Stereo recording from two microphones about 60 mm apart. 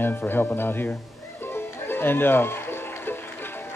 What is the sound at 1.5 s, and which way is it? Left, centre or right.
Music, left.